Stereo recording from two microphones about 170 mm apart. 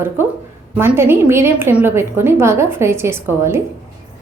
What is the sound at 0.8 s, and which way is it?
A woman's voice, 15° right (ahead or behind).